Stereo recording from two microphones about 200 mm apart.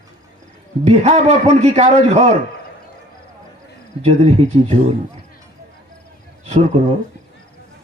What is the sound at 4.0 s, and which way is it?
Speech, 35° right (ahead or behind).